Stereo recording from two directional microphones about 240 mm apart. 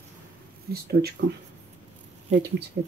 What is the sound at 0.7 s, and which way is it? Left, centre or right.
Speech, right.